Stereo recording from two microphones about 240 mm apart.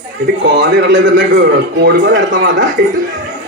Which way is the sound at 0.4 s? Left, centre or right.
Right.